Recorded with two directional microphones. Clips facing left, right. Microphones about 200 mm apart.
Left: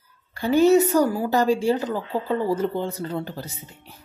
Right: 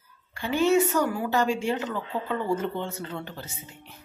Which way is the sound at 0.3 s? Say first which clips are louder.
Left 6 dB; 40° left (ahead or behind).